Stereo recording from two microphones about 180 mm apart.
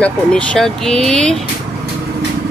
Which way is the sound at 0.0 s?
5° left (ahead or behind).